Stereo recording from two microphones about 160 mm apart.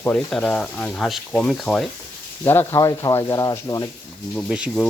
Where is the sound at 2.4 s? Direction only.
15° left (ahead or behind).